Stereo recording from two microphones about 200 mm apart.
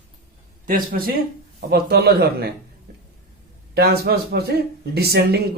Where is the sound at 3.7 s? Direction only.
50° right (ahead or behind).